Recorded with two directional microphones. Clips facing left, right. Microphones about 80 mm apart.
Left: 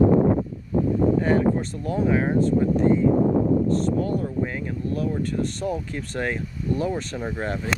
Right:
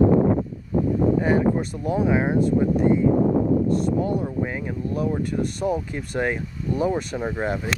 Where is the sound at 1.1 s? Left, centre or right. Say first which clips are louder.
Even; centre.